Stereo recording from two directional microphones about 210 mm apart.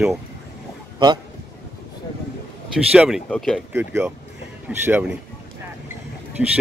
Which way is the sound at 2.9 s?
5° right (ahead or behind).